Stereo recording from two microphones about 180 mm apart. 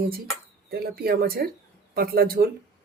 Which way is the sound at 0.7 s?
60° right (ahead or behind).